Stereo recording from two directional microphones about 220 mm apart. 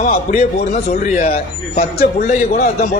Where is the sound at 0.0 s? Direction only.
30° left (ahead or behind).